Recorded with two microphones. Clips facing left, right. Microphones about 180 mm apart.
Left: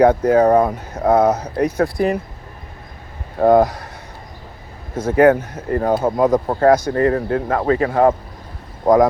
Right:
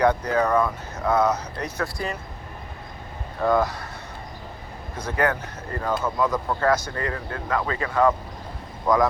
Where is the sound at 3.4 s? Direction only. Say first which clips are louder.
Left 9 dB; 50° left (ahead or behind).